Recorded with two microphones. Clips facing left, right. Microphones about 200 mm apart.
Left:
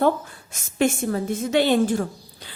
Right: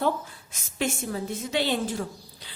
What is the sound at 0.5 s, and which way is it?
A woman's voice, 50° left (ahead or behind).